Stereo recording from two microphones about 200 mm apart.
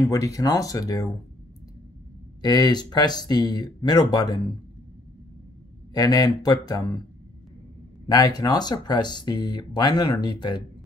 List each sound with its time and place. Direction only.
0.0 s speech: 15° left (ahead or behind)
2.4 s speech: 20° left (ahead or behind)
5.9 s speech: 20° left (ahead or behind)
8.1 s speech: 20° left (ahead or behind)